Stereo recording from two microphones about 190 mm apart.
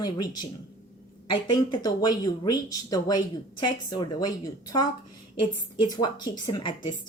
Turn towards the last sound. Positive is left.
turn(degrees=25)  # may be behind; listen again after turning